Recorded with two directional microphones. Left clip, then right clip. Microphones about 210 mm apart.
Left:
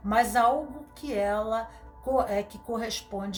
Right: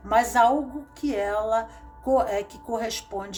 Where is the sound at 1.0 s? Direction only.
30° right (ahead or behind).